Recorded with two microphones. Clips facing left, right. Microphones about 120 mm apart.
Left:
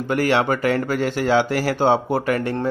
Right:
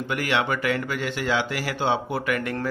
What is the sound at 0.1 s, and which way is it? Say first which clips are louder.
Speech: left 6 dB; 40° left (ahead or behind).